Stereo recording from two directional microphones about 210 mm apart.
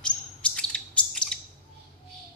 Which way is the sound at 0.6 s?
5° left (ahead or behind).